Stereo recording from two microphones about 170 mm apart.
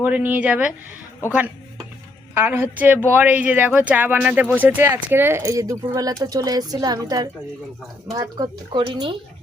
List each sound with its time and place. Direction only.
0.0 s speech: 10° right (ahead or behind)
2.3 s speech: 10° right (ahead or behind); by 9.1 s 30° right (ahead or behind)